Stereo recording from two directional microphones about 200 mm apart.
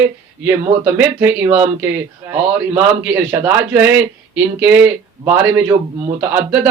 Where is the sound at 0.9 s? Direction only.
10° right (ahead or behind).